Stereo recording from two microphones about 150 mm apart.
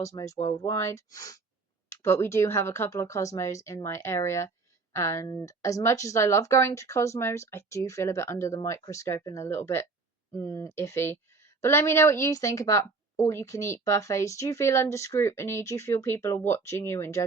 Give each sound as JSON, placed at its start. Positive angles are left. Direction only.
{"t": 0.0, "sound": "speech", "side_deg": 20}